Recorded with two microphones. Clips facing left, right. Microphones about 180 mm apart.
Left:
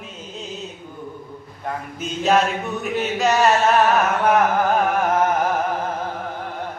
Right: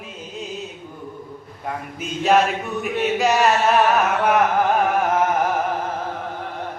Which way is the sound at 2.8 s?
10° right (ahead or behind).